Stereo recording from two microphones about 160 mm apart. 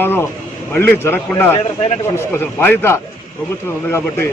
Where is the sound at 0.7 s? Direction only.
15° left (ahead or behind).